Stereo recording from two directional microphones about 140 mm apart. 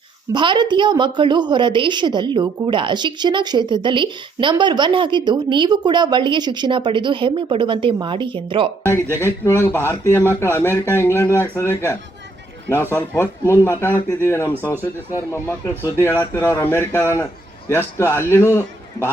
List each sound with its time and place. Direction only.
0.3 s a woman's voice: 35° right (ahead or behind)
9.2 s a man's voice: 15° left (ahead or behind)
15.7 s speech: 15° right (ahead or behind)
16.0 s a man's voice: 20° left (ahead or behind)